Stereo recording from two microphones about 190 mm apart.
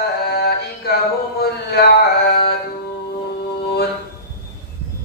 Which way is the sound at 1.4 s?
55° left (ahead or behind).